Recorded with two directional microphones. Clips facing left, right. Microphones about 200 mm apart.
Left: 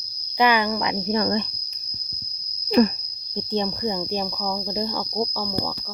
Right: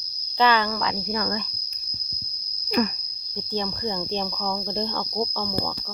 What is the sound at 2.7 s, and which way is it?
Speech, 30° left (ahead or behind).